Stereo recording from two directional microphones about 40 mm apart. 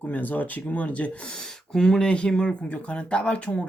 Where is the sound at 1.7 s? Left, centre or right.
Centre.